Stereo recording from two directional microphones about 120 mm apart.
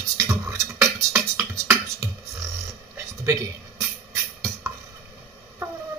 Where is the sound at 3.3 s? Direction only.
25° right (ahead or behind).